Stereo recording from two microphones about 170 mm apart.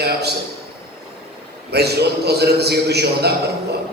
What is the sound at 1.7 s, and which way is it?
A man's voice, 75° right (ahead or behind).